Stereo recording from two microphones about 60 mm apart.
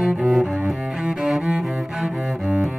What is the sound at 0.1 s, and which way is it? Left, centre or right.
Cello, centre.